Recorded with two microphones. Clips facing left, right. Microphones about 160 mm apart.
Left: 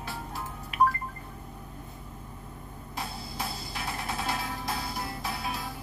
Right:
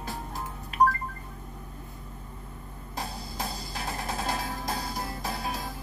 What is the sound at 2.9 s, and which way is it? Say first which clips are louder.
Music: right 1 dB; 40° right (ahead or behind).